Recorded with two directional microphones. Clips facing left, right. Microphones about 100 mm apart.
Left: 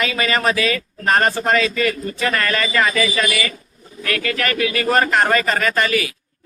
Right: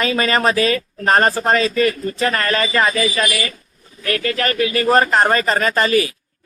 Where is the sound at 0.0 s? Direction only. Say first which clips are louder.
Right 2 dB; 35° right (ahead or behind).